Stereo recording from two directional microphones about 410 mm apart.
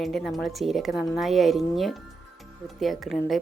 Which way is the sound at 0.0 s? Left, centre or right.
Centre.